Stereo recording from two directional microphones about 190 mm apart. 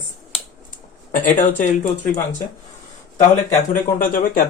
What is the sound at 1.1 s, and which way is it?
Speech, 45° left (ahead or behind).